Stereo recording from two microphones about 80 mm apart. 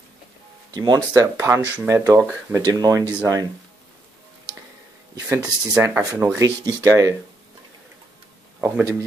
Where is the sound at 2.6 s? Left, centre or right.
Right.